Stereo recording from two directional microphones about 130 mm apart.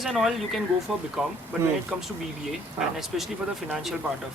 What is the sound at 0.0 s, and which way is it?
Speech, centre (ahead or behind).